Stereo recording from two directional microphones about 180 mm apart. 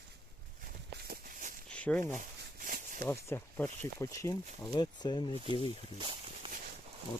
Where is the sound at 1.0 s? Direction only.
55° right (ahead or behind).